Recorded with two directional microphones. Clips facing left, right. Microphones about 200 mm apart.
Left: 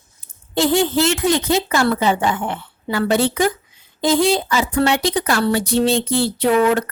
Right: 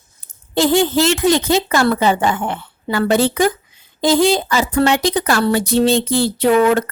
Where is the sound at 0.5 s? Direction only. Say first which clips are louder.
Right 2 dB; 90° right.